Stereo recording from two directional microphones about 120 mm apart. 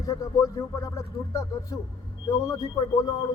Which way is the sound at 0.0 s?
30° left (ahead or behind).